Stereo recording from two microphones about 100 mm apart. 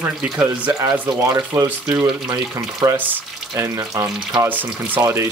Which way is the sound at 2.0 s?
50° right (ahead or behind).